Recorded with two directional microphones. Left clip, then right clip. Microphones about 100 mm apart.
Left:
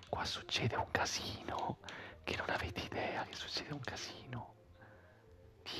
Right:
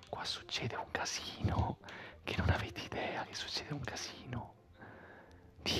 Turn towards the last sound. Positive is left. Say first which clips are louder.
# right 9 dB
turn(degrees=-40)  # may be behind; listen again after turning